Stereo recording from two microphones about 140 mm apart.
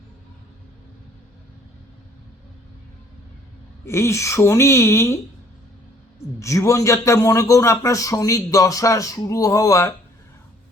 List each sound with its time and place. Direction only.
3.8 s a man's voice: 20° left (ahead or behind)
6.4 s a man's voice: 20° left (ahead or behind)